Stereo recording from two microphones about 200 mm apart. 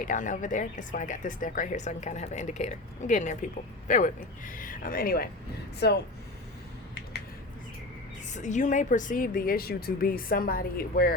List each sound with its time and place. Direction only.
0.0 s speech: 40° left (ahead or behind); by 6.0 s 55° left (ahead or behind)
8.3 s a woman's voice: 35° left (ahead or behind)